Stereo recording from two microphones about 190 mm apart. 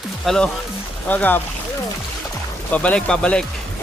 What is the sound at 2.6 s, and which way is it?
Speech, 5° left (ahead or behind).